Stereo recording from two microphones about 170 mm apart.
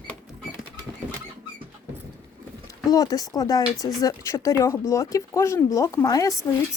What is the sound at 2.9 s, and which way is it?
Speech, 20° left (ahead or behind).